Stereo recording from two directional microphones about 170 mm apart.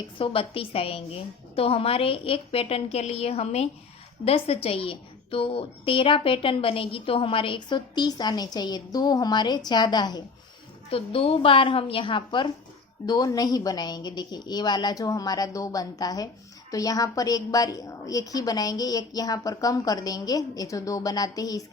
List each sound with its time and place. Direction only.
0.2 s a woman's voice: 35° left (ahead or behind)
10.9 s a woman's voice: 35° left (ahead or behind)